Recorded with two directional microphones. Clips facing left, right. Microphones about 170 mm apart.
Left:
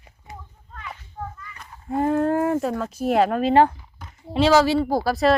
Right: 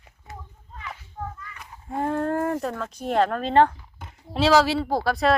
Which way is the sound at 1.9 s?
5° left (ahead or behind).